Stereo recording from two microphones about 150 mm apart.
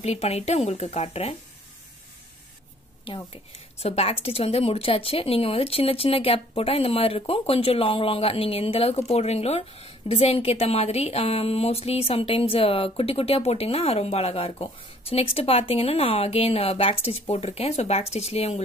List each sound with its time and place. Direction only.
0.0 s speech: 45° left (ahead or behind)
3.3 s a woman's voice: 40° left (ahead or behind)